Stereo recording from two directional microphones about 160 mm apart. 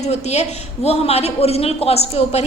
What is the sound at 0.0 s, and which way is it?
A woman's voice, 45° left (ahead or behind).